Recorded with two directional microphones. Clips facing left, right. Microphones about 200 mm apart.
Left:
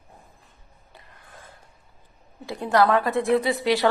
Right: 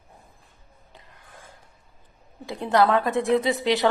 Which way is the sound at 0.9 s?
15° right (ahead or behind).